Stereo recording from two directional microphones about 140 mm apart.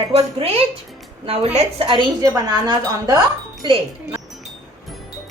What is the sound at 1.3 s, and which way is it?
A woman's voice, 45° right (ahead or behind).